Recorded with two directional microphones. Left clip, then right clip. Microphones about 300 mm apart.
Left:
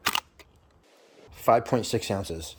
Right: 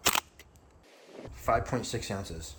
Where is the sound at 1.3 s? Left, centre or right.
Left.